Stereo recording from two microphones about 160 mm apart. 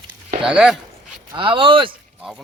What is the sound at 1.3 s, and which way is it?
Speech, 30° right (ahead or behind).